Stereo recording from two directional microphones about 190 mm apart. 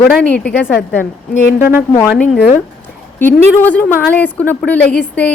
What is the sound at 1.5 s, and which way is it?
Speech, 55° left (ahead or behind).